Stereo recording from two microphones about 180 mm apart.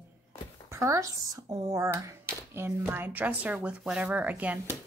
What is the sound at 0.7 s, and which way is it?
A woman's voice, 15° right (ahead or behind).